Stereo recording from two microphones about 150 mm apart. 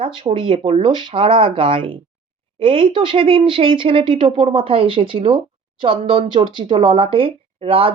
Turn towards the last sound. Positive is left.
turn(degrees=-40)  # may be behind; listen again after turning